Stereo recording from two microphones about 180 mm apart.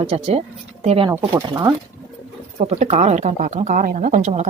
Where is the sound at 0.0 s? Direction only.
35° right (ahead or behind).